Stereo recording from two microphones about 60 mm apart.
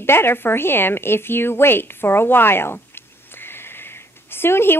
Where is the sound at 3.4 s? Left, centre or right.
Left.